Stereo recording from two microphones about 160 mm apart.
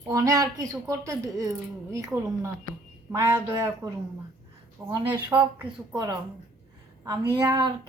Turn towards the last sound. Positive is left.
turn(degrees=-15)  # may be behind; listen again after turning